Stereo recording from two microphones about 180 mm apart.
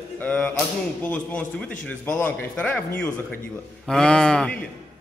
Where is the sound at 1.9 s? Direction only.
10° left (ahead or behind).